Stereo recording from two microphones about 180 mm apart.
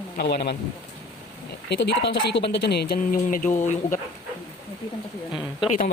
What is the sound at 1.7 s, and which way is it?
Speech, 65° left (ahead or behind).